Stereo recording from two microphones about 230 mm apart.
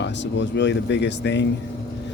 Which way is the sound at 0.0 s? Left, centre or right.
Left.